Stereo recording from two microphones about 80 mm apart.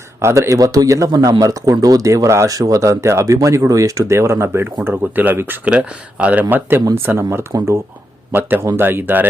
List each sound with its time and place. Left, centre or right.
0.2 s a man's voice: right; by 6.4 s centre
6.5 s speech: right